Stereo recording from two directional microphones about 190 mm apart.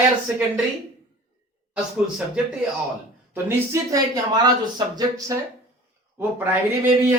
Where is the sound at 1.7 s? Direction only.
5° right (ahead or behind).